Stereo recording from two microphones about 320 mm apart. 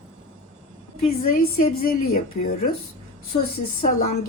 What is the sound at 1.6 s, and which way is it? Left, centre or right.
Speech, left.